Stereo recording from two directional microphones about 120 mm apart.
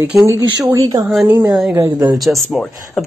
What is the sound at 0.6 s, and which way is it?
Speech, 30° right (ahead or behind).